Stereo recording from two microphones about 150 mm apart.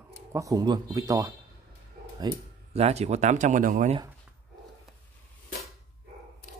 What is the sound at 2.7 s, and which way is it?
Speech, 45° right (ahead or behind).